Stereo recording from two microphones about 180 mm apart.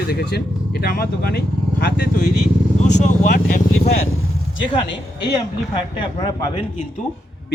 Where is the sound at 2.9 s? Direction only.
45° left (ahead or behind).